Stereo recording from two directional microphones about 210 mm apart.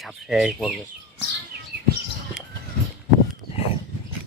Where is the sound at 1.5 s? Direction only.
50° right (ahead or behind).